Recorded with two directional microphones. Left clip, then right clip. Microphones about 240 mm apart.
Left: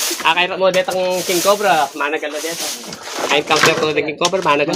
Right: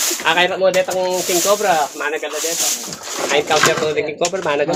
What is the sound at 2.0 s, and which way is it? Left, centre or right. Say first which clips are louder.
Speech: left 2 dB; left.